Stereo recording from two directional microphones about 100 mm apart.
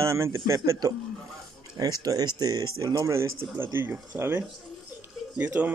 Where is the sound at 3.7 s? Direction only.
20° right (ahead or behind).